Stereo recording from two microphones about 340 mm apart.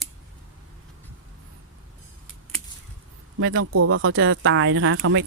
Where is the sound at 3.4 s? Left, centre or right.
Right.